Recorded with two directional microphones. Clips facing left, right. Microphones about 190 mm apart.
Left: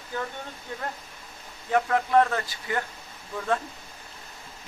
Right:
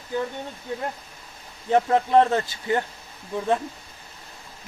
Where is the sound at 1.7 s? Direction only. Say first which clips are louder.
Right 4 dB; 30° right (ahead or behind).